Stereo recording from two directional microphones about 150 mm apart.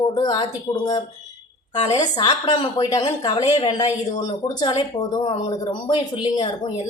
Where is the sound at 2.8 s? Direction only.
30° left (ahead or behind).